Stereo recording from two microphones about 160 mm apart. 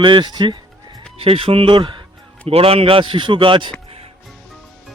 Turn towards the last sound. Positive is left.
turn(degrees=-30)  # may be behind; listen again after turning